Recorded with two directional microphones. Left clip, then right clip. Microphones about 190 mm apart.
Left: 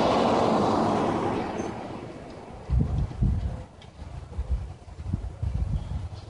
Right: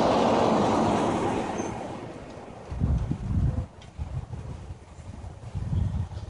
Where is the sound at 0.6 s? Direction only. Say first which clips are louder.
Even; 25° right (ahead or behind); by 2.4 s 45° right (ahead or behind).